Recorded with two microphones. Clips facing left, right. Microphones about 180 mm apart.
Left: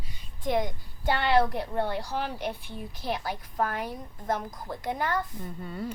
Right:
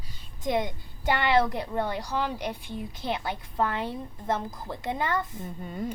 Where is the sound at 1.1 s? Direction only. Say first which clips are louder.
Even; 20° right (ahead or behind).